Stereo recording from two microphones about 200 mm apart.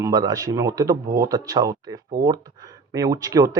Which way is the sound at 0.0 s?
20° right (ahead or behind).